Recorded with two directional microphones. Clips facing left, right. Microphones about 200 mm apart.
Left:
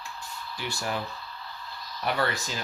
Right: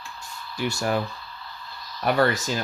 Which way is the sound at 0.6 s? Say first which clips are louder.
Right 8 dB; 45° right (ahead or behind).